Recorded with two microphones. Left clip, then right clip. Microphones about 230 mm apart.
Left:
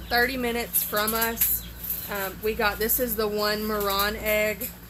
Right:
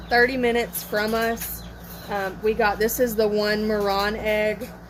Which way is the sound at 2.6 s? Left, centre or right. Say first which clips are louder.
Right 4 dB; right.